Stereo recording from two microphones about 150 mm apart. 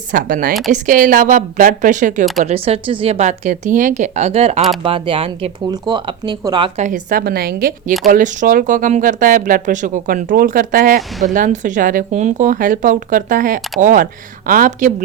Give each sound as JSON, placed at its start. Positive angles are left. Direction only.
{"t": 0.1, "sound": "a woman's voice", "side_deg": -65}
{"t": 2.4, "sound": "speech", "side_deg": -45}
{"t": 6.7, "sound": "a woman's voice", "side_deg": -60}
{"t": 8.0, "sound": "speech", "side_deg": -60}
{"t": 11.3, "sound": "speech", "side_deg": -55}